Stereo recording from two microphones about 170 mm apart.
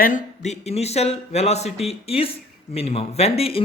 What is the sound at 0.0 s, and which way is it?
A man's voice, 45° left (ahead or behind).